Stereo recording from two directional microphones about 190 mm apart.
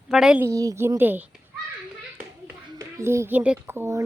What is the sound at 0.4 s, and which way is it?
Speech, 15° right (ahead or behind).